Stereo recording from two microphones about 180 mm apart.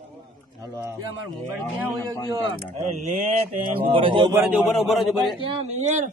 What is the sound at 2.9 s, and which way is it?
Mantra, 40° right (ahead or behind).